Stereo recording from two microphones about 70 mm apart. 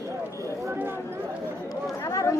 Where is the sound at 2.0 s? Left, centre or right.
Left.